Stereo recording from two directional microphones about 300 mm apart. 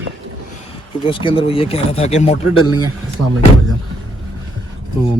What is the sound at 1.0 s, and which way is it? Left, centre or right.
Speech, centre.